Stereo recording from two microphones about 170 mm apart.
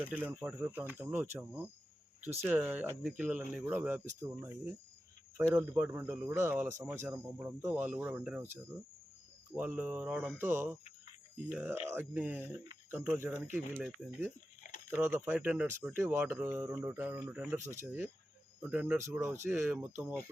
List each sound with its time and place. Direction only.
0.0 s speech: 10° right (ahead or behind)
9.6 s speech: 10° right (ahead or behind)
14.8 s speech: 10° right (ahead or behind)